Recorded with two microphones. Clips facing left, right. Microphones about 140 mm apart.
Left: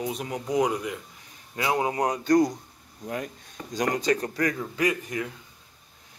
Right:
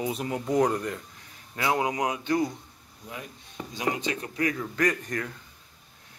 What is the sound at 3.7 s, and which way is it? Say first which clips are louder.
Speech: left 5 dB; 45° left (ahead or behind).